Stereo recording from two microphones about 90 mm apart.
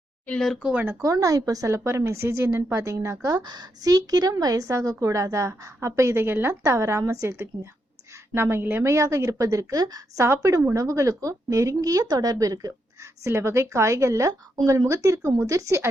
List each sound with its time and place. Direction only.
0.3 s speech: 5° left (ahead or behind)
0.6 s speech: 15° right (ahead or behind)
1.0 s speech: 40° right (ahead or behind)
3.2 s speech: 50° right (ahead or behind)
10.2 s a woman's voice: 30° right (ahead or behind)